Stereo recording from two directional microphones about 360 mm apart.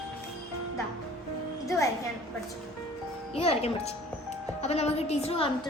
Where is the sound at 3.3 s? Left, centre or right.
Centre.